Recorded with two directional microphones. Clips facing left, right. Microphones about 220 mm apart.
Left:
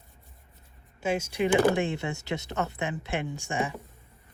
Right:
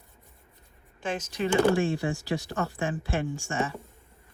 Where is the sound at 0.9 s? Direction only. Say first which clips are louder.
Left 3 dB; 10° left (ahead or behind).